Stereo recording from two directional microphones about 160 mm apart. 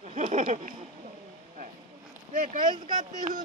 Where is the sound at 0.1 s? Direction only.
50° right (ahead or behind).